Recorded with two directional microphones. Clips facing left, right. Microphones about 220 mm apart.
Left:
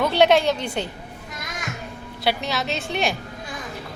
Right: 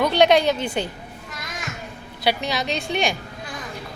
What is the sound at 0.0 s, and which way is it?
Speech, 5° left (ahead or behind).